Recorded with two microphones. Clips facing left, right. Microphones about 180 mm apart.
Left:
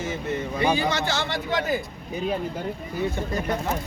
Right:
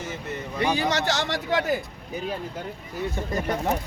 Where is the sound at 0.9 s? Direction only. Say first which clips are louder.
Right 1 dB; 75° right (ahead or behind).